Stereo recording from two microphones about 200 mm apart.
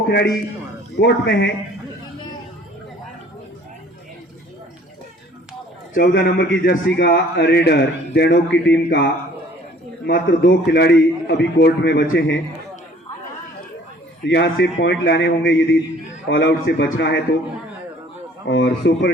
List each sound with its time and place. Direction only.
0.9 s speech: 60° left (ahead or behind)
5.9 s speech: 55° left (ahead or behind)
10.2 s speech: 60° left (ahead or behind)
14.3 s speech: 55° left (ahead or behind)
18.4 s speech: 65° left (ahead or behind)